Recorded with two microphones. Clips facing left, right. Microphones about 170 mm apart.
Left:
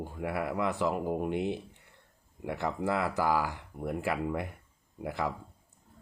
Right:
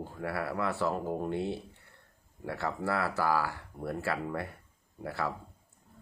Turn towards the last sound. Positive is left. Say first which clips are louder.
# left 1 dB
turn(degrees=15)  # may be behind; listen again after turning